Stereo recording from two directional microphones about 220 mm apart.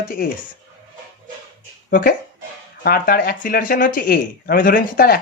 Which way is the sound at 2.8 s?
40° left (ahead or behind).